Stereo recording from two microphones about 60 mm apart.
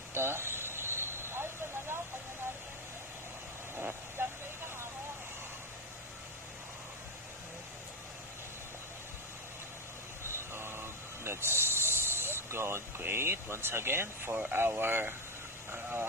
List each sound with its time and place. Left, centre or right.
0.1 s vehicle: right
3.8 s vehicle: right
10.5 s a sound: right
14.5 s speech: right
15.7 s vehicle: right